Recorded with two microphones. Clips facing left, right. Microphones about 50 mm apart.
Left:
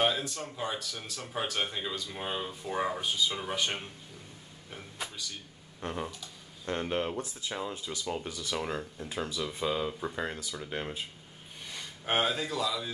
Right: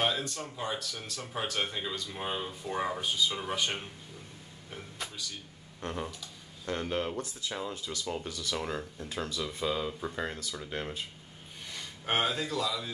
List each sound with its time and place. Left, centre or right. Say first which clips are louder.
0.0 s speech: left 2 dB; centre
4.6 s a sound: left 1 dB; centre
5.8 s speech: left 1 dB; centre
8.5 s speech: left 2 dB; centre